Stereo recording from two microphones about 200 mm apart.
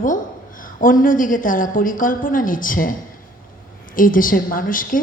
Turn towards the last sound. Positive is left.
turn(degrees=45)  # may be behind; listen again after turning